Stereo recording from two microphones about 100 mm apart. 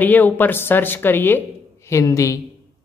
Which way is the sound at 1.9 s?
30° left (ahead or behind).